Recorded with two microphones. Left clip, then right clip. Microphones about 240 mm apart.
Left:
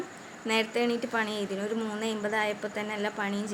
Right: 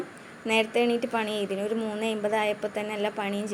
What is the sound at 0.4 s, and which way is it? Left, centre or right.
A woman's voice, centre.